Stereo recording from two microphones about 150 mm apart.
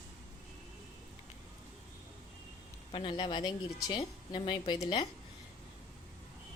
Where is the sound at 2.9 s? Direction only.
35° left (ahead or behind).